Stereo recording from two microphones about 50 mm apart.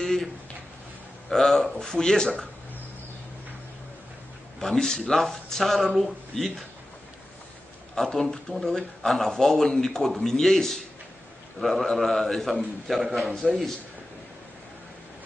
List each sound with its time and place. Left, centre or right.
0.0 s a sound: centre
1.3 s a man's voice: centre
4.6 s a man's voice: centre
7.9 s a man's voice: centre